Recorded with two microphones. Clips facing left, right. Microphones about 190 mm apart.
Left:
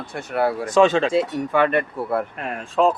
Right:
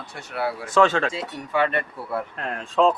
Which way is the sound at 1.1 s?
55° left (ahead or behind).